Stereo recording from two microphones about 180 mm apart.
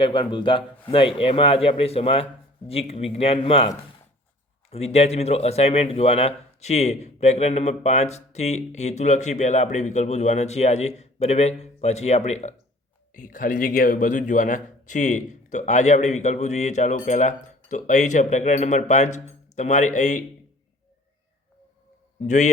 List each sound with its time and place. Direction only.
0.0 s speech: 25° left (ahead or behind)
4.7 s speech: 35° left (ahead or behind)
22.2 s speech: 40° left (ahead or behind)